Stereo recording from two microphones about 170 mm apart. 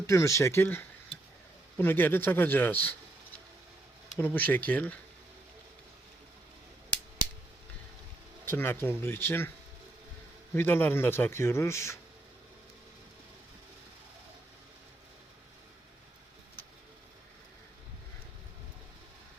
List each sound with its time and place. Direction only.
0.1 s speech: 15° left (ahead or behind)
4.4 s speech: 10° left (ahead or behind)
8.4 s speech: 15° left (ahead or behind)
10.5 s speech: 10° left (ahead or behind)